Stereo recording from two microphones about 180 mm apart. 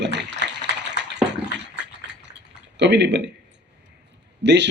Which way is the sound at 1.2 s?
75° right (ahead or behind).